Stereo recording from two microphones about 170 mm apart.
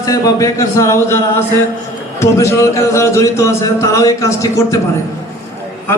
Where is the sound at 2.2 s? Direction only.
15° left (ahead or behind).